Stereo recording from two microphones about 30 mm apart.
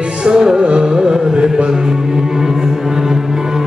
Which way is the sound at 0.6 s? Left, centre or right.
Right.